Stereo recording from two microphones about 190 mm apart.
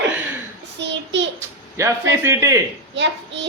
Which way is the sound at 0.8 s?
70° right (ahead or behind).